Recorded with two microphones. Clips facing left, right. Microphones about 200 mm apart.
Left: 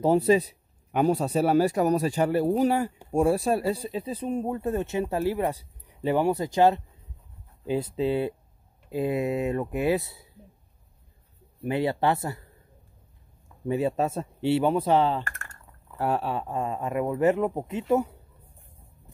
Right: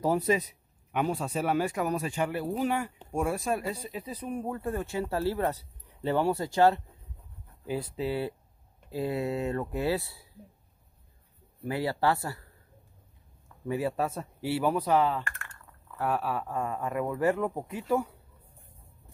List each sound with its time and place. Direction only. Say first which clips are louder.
0.0 s a man's voice: left 6 dB; 30° left (ahead or behind)
11.6 s speech: left 3 dB; 20° left (ahead or behind)
13.7 s speech: left 4 dB; 25° left (ahead or behind)
15.2 s typing: left 1 dB; 45° left (ahead or behind)
15.6 s speech: left 3 dB; 30° left (ahead or behind)